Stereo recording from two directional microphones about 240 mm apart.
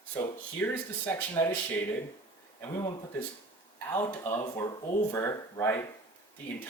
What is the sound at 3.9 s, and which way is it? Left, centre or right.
Speech, centre.